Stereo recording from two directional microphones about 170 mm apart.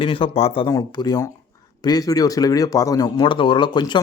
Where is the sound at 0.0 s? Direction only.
30° left (ahead or behind).